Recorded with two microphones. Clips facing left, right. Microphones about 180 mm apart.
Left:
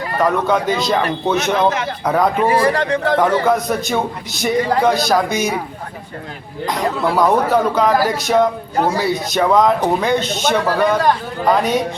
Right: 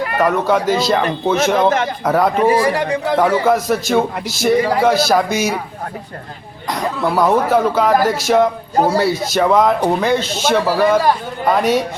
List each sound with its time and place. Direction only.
0.2 s a man's voice: 5° right (ahead or behind)
2.0 s a man's voice: 5° right (ahead or behind)
6.7 s a man's voice: centre (ahead or behind)